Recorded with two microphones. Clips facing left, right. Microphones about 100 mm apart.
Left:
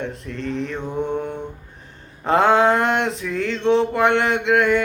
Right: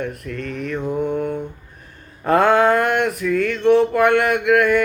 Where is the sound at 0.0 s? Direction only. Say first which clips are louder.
Right 1 dB; 25° left (ahead or behind).